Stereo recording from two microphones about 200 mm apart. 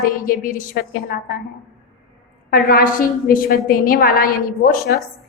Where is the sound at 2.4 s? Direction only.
45° left (ahead or behind).